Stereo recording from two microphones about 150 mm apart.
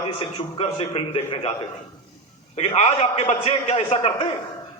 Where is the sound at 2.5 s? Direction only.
45° left (ahead or behind).